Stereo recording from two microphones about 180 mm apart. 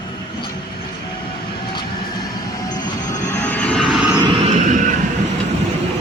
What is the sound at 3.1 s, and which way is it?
Vehicle, 15° left (ahead or behind).